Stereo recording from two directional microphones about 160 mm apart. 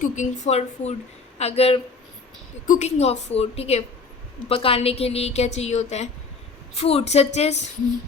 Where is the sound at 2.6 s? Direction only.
50° left (ahead or behind).